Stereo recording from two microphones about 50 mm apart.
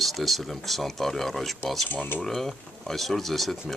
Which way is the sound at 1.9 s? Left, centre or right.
Left.